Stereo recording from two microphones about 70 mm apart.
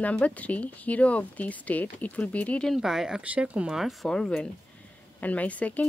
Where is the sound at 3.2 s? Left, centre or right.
Centre.